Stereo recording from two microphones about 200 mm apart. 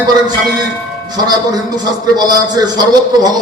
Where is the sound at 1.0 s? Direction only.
20° right (ahead or behind).